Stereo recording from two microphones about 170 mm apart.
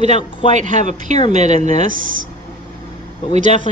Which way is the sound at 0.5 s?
45° right (ahead or behind).